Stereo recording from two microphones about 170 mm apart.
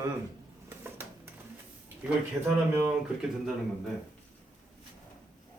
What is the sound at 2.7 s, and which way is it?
Speech, 5° right (ahead or behind).